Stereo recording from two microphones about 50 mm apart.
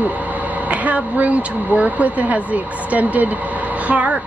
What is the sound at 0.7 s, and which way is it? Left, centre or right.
Speech, right.